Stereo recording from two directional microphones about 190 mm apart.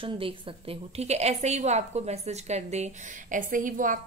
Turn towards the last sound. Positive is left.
turn(degrees=-45)  # may be behind; listen again after turning